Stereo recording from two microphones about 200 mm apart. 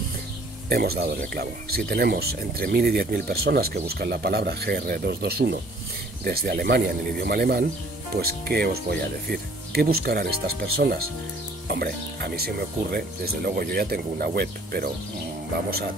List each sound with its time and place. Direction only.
0.7 s speech: 50° right (ahead or behind)